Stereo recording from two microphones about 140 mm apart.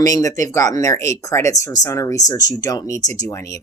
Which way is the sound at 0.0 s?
25° left (ahead or behind).